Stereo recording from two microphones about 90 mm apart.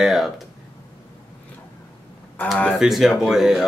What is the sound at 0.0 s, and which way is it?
Speech, centre (ahead or behind).